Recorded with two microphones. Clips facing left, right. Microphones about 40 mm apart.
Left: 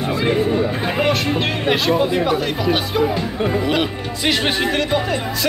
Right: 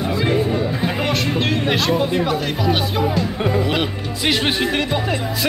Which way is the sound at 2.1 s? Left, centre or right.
Centre.